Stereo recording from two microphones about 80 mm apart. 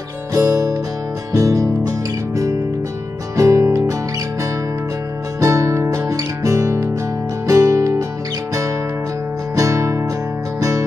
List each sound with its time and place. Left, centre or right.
0.3 s music: right
5.4 s music: right
9.6 s music: right